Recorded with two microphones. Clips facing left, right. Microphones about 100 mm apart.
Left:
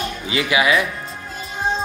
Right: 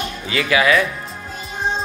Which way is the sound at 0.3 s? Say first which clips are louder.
Right 2 dB; 20° left (ahead or behind).